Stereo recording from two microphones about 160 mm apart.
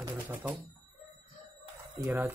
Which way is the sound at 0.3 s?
10° right (ahead or behind).